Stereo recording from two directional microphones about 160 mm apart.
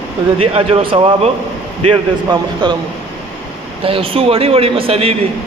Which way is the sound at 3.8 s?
35° right (ahead or behind).